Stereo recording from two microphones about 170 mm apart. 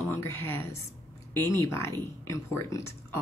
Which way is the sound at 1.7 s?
15° left (ahead or behind).